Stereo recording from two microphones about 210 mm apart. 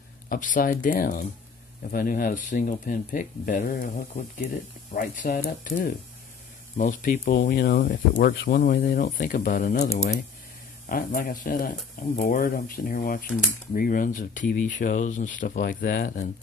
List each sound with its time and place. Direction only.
0.3 s speech: 40° left (ahead or behind)
4.9 s speech: 40° left (ahead or behind)
10.9 s speech: 45° left (ahead or behind)